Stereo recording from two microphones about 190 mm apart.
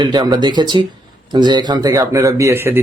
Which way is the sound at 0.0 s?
25° right (ahead or behind).